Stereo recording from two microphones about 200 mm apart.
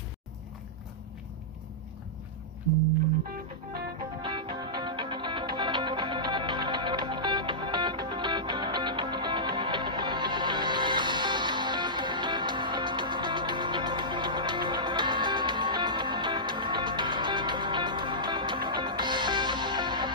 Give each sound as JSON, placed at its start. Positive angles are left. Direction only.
{"t": 3.3, "sound": "music", "side_deg": -50}
{"t": 4.2, "sound": "music", "side_deg": -20}